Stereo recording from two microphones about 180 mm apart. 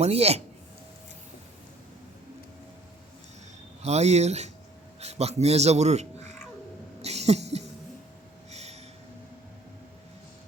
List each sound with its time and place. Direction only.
0.0 s speech: 35° right (ahead or behind)
3.8 s a man's voice: 35° right (ahead or behind)
7.0 s a sound: 35° right (ahead or behind)
8.4 s snort: 35° right (ahead or behind)